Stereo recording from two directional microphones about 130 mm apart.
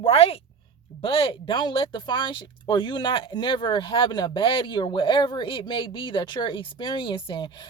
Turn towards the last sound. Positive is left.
turn(degrees=40)  # may be behind; listen again after turning